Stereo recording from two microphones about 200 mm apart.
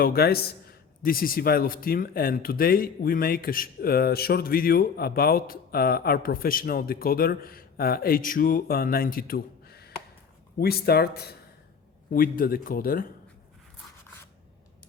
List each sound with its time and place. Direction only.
0.0 s a man's voice: 50° left (ahead or behind)